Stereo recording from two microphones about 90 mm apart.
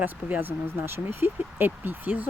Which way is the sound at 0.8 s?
25° right (ahead or behind).